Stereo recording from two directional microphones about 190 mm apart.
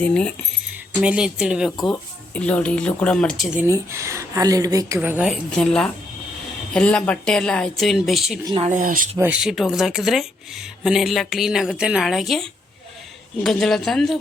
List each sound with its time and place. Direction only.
0.0 s speech: 5° left (ahead or behind)
1.0 s speech: 5° right (ahead or behind)
3.7 s speech: 15° right (ahead or behind)
4.9 s speech: 5° right (ahead or behind)
8.4 s speech: 30° right (ahead or behind)
9.1 s speech: 10° right (ahead or behind)